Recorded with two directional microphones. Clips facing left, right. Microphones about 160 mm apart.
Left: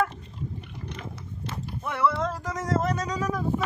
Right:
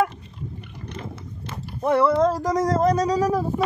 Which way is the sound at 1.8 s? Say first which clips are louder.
Right 8 dB; 40° right (ahead or behind).